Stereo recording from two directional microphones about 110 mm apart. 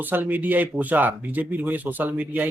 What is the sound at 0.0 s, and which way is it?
Speech, 15° right (ahead or behind).